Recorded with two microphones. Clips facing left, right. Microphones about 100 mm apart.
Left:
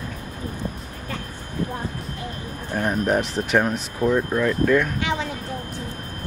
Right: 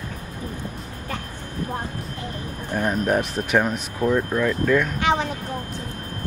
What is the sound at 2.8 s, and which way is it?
Speech, 15° left (ahead or behind).